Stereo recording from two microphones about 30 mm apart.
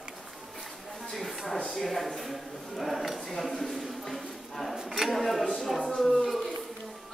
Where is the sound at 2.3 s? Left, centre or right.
Centre.